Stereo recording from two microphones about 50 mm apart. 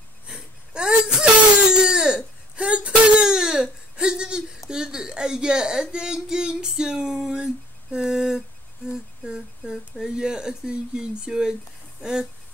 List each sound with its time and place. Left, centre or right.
0.3 s wail: centre
4.6 s a sound: centre
8.8 s speech: centre